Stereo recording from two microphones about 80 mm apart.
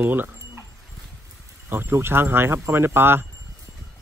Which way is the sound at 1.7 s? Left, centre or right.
Right.